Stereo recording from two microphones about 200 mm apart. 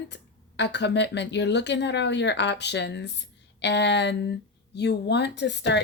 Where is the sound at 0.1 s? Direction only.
60° left (ahead or behind).